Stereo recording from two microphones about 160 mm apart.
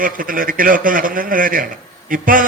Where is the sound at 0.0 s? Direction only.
60° right (ahead or behind).